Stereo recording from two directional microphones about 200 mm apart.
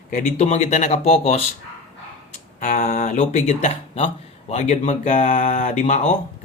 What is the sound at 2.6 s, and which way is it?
Speech, 45° left (ahead or behind).